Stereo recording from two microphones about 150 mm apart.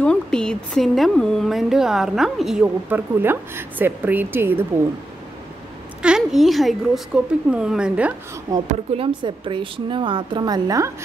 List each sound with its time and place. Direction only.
0.0 s a woman's voice: 5° left (ahead or behind); by 4.6 s 15° right (ahead or behind)
6.0 s a woman's voice: 5° right (ahead or behind)
8.6 s a woman's voice: 40° right (ahead or behind)